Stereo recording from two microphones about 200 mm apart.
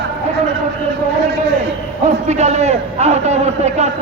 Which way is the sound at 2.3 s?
35° right (ahead or behind).